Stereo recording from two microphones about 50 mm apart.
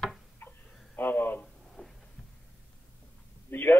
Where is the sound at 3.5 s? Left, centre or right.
Left.